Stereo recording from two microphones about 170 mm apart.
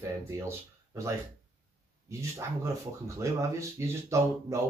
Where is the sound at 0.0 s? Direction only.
15° right (ahead or behind).